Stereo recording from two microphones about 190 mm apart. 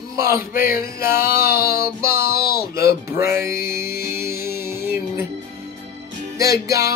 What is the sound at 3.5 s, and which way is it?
Speech, 55° left (ahead or behind).